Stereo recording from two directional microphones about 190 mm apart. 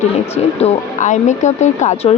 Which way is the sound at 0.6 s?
40° left (ahead or behind).